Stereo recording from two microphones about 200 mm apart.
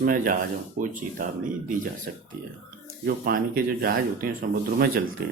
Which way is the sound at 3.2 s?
45° right (ahead or behind).